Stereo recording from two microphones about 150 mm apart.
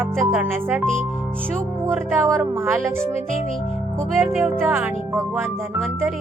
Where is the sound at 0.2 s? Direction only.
15° right (ahead or behind).